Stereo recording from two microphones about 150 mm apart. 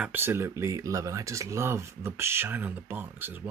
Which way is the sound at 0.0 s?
15° right (ahead or behind).